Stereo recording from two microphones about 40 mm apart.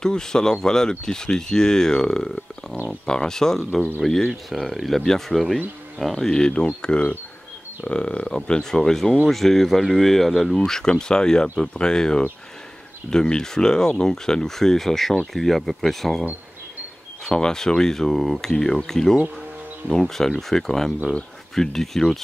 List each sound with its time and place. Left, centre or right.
0.0 s speech: centre
10.6 s speech: centre
17.2 s speech: centre